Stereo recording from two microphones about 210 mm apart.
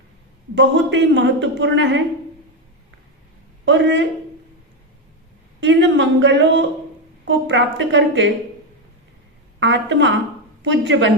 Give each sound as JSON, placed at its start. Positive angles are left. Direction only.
{"t": 0.5, "sound": "a woman's voice", "side_deg": -60}
{"t": 3.7, "sound": "a woman's voice", "side_deg": -60}
{"t": 5.6, "sound": "a woman's voice", "side_deg": -60}
{"t": 9.6, "sound": "a woman's voice", "side_deg": -60}